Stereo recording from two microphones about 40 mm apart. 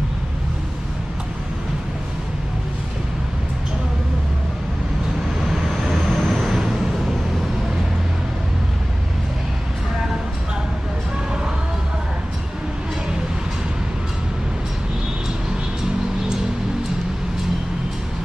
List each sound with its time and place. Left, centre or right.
5.5 s vehicle: centre